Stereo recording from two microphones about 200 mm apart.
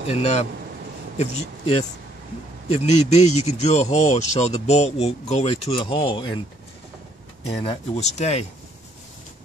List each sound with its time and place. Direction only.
0.1 s speech: 35° left (ahead or behind)
2.7 s speech: 35° left (ahead or behind)
7.4 s speech: 30° left (ahead or behind)